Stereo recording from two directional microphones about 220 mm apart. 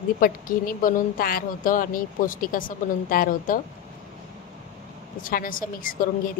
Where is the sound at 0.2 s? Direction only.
40° left (ahead or behind).